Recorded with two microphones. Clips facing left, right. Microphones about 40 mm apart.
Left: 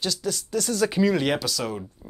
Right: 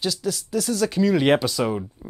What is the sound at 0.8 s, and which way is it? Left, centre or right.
Speech, centre.